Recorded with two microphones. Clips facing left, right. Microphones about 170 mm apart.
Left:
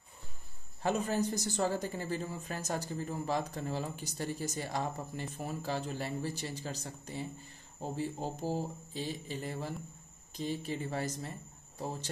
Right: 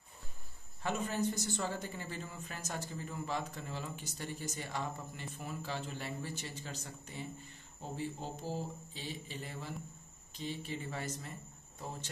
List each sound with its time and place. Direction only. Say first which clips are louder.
0.8 s a man's voice: left 4 dB; 40° left (ahead or behind)